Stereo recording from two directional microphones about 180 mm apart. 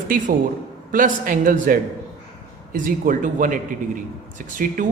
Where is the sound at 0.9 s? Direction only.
50° right (ahead or behind).